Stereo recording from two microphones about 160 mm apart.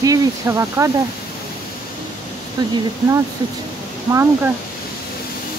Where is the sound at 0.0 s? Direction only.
20° right (ahead or behind).